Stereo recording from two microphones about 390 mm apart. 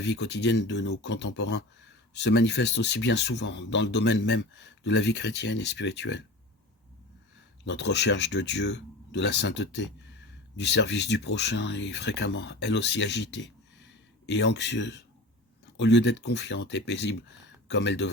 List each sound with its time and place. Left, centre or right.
0.0 s speech: left
7.6 s speech: left